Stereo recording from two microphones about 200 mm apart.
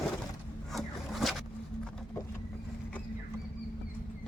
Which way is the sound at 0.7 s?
Centre (ahead or behind).